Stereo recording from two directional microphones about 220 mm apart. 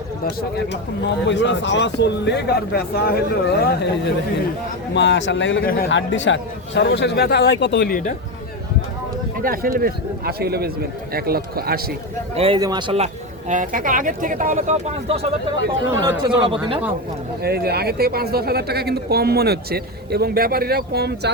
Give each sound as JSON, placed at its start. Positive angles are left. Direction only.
{"t": 1.3, "sound": "speech", "side_deg": 55}
{"t": 5.6, "sound": "speech", "side_deg": 45}
{"t": 9.4, "sound": "speech", "side_deg": -40}
{"t": 12.3, "sound": "a man's voice", "side_deg": -25}
{"t": 13.5, "sound": "speech", "side_deg": -35}
{"t": 15.9, "sound": "a man's voice", "side_deg": -20}
{"t": 17.4, "sound": "speech", "side_deg": -45}